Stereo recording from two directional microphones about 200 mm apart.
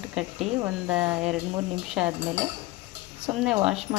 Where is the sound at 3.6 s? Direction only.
Centre (ahead or behind).